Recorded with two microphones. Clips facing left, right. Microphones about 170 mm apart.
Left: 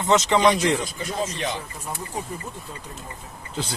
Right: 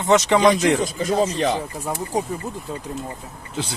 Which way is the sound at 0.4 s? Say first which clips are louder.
Right 3 dB; 40° right (ahead or behind).